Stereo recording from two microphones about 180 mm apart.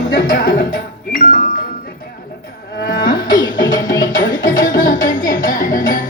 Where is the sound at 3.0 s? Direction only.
25° left (ahead or behind).